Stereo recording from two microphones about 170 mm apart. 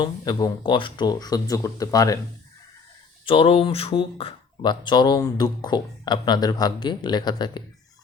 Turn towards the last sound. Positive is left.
turn(degrees=25)  # may be behind; listen again after turning